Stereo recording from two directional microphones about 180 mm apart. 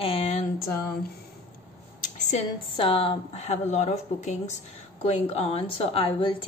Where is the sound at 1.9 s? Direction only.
40° left (ahead or behind).